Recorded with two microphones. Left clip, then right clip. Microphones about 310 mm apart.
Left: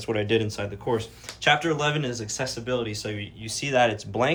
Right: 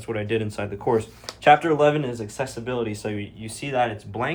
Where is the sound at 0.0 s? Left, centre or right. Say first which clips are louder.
Left 2 dB; centre.